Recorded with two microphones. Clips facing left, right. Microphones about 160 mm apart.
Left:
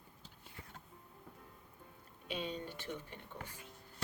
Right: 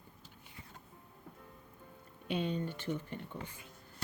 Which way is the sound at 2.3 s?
55° right (ahead or behind).